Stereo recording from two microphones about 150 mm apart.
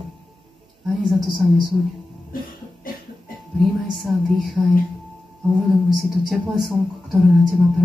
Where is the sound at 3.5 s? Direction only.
Centre (ahead or behind).